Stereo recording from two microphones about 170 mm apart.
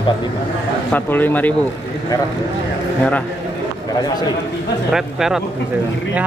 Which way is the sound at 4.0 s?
25° left (ahead or behind).